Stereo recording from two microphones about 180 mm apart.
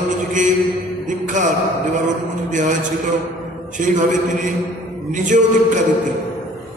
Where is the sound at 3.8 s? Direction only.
45° right (ahead or behind).